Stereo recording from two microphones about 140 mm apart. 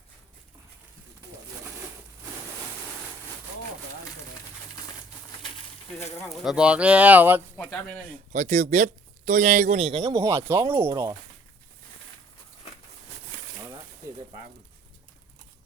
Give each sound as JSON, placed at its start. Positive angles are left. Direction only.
{"t": 6.2, "sound": "speech", "side_deg": -5}
{"t": 7.5, "sound": "speech", "side_deg": 10}
{"t": 8.3, "sound": "speech", "side_deg": -60}
{"t": 9.7, "sound": "a man's voice", "side_deg": -45}
{"t": 10.2, "sound": "speech", "side_deg": -20}